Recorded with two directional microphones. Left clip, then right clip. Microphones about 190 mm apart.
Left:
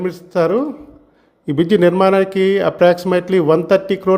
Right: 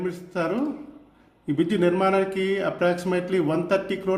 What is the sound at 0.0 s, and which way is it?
Speech, 35° left (ahead or behind).